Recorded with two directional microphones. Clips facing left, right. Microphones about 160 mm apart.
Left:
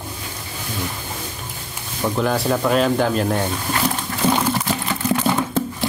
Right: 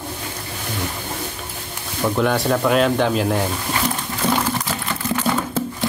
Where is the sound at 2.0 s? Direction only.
Centre (ahead or behind).